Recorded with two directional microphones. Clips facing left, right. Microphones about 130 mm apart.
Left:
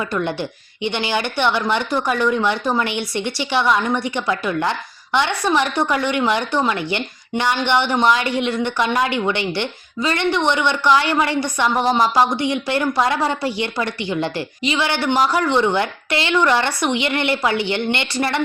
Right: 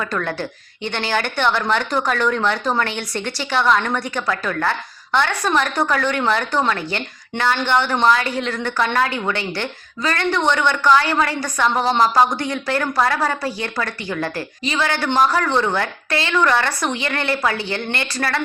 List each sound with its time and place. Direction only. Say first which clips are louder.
0.0 s a woman's voice: left 2 dB; 20° left (ahead or behind)
11.8 s a woman's voice: even; 15° left (ahead or behind)